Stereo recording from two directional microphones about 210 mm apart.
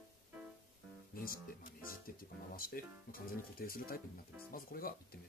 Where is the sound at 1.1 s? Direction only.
45° left (ahead or behind).